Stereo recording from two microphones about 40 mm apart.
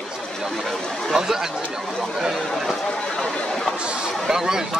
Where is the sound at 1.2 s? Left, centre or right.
Centre.